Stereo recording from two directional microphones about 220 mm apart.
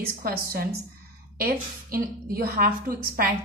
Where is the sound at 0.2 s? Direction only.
40° right (ahead or behind).